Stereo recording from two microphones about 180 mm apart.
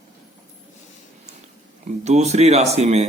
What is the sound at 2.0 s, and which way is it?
Speech, 40° right (ahead or behind).